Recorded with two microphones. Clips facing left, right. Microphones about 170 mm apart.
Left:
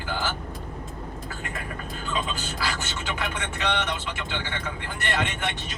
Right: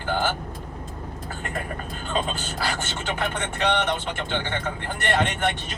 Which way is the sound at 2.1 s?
50° right (ahead or behind).